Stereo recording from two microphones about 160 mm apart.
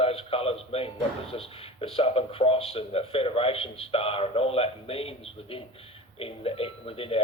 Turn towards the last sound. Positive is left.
turn(degrees=35)  # may be behind; listen again after turning